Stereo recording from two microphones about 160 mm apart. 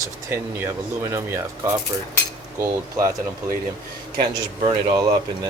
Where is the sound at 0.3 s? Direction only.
15° right (ahead or behind).